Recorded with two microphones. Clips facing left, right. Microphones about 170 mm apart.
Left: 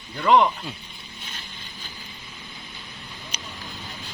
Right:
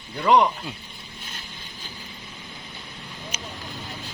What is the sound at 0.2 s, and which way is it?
Speech, 10° right (ahead or behind).